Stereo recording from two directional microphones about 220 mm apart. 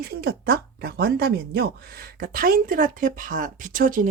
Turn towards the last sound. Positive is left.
turn(degrees=-40)  # may be behind; listen again after turning